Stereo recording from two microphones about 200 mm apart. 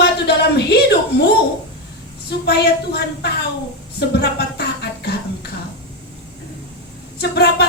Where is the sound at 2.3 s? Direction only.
55° left (ahead or behind).